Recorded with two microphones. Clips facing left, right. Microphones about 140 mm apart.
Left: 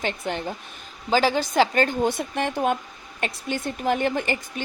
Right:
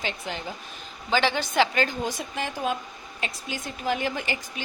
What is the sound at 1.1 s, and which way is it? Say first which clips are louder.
Speech: left 4 dB; 35° left (ahead or behind).